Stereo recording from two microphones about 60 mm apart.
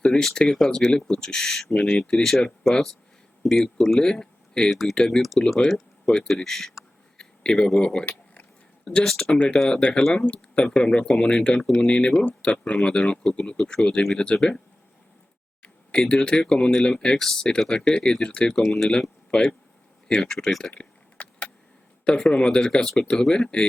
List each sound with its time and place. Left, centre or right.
0.0 s speech: centre
3.4 s speech: centre
9.0 s speech: centre
9.3 s speech: centre
15.9 s speech: centre
20.7 s a sound: left
22.3 s speech: centre